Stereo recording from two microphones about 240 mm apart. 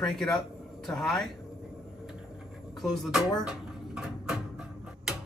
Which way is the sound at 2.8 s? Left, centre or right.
Centre.